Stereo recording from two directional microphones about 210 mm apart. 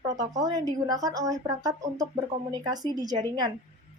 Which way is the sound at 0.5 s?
15° right (ahead or behind).